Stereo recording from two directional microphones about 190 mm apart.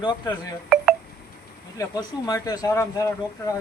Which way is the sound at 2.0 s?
20° left (ahead or behind).